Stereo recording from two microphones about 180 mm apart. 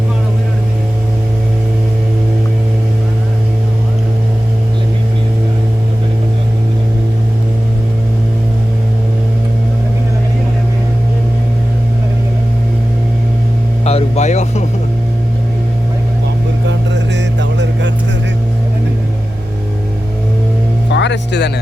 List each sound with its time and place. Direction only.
13.8 s a sound: 40° left (ahead or behind)
16.6 s music: 80° right
20.9 s music: 75° left (ahead or behind)